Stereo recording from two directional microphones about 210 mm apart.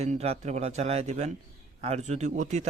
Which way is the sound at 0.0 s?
30° right (ahead or behind).